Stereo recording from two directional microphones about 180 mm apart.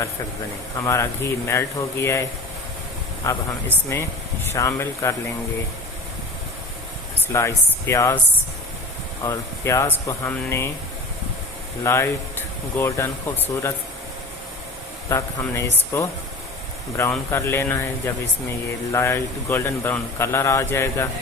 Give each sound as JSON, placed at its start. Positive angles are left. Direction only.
{"t": 0.8, "sound": "speech", "side_deg": 15}
{"t": 3.3, "sound": "speech", "side_deg": 15}
{"t": 7.3, "sound": "speech", "side_deg": 15}
{"t": 9.2, "sound": "speech", "side_deg": 15}
{"t": 11.8, "sound": "speech", "side_deg": 15}
{"t": 15.1, "sound": "speech", "side_deg": 15}
{"t": 17.0, "sound": "speech", "side_deg": 15}